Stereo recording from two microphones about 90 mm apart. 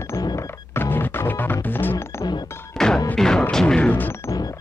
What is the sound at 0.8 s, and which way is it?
Music, 25° left (ahead or behind).